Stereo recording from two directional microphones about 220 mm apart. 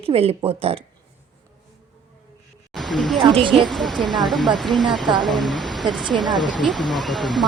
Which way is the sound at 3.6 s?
Centre (ahead or behind).